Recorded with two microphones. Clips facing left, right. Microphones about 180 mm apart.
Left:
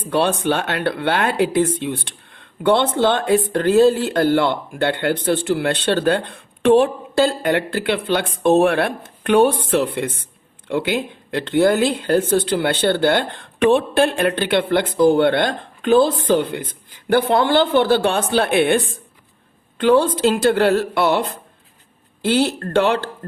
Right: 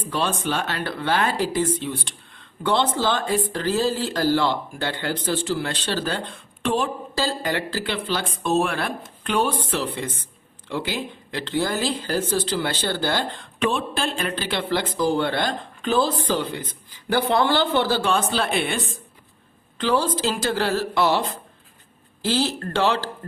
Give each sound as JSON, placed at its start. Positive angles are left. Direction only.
{"t": 0.1, "sound": "speech", "side_deg": 60}